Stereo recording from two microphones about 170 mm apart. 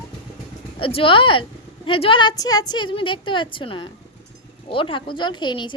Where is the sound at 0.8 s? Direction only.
30° left (ahead or behind).